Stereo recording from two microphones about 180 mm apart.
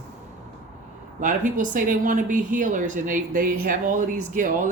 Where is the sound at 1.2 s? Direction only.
45° right (ahead or behind).